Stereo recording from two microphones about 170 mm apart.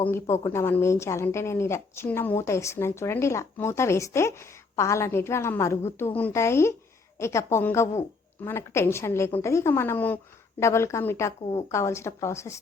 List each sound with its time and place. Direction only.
0.4 s a woman's voice: 15° left (ahead or behind)